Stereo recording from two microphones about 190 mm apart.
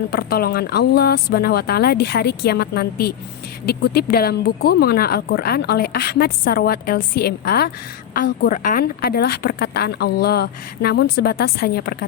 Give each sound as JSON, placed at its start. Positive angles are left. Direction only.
{"t": 0.1, "sound": "a woman's voice", "side_deg": 55}